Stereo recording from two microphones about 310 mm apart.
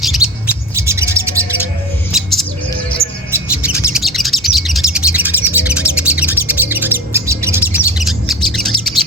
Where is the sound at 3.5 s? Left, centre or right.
Centre.